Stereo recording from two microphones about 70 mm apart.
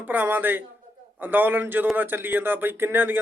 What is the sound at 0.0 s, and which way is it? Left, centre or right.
A man's voice, right.